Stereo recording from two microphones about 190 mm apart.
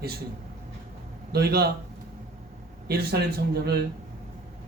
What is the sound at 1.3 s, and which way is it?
Speech, 55° right (ahead or behind).